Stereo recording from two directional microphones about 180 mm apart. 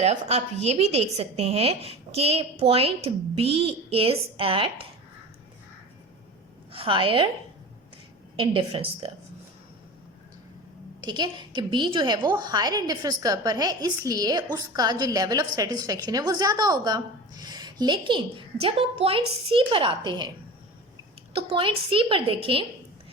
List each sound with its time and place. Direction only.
0.0 s a woman's voice: 35° right (ahead or behind)
6.7 s a woman's voice: 30° right (ahead or behind)
8.4 s a woman's voice: 30° right (ahead or behind)
11.0 s a woman's voice: 25° right (ahead or behind)
21.3 s a woman's voice: 30° right (ahead or behind)